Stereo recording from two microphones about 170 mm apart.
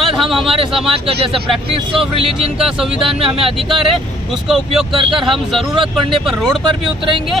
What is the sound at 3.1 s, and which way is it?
Speech, 35° right (ahead or behind).